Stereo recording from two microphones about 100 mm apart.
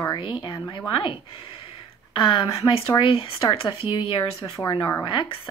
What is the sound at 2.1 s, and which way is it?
Speech, 60° left (ahead or behind).